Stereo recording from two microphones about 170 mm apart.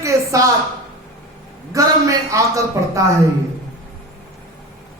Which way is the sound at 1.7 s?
20° right (ahead or behind).